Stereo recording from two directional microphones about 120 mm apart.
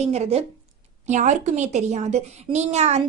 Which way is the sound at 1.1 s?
90° right.